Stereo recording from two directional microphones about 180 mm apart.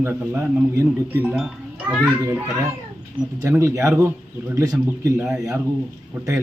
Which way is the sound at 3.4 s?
15° right (ahead or behind).